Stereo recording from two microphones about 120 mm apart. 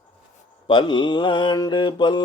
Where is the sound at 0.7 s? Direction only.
40° left (ahead or behind).